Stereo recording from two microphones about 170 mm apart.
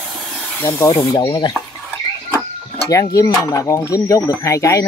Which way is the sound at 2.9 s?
20° left (ahead or behind).